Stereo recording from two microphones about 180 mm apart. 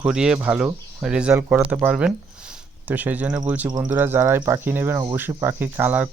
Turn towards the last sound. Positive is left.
turn(degrees=-10)  # may be behind; listen again after turning